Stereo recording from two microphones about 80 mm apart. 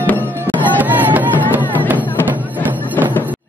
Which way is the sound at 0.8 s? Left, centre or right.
Right.